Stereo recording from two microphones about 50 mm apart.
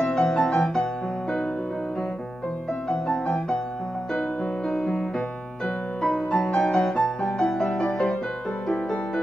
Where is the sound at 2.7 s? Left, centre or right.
Centre.